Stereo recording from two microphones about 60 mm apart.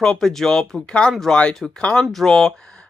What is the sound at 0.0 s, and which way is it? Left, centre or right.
Speech, centre.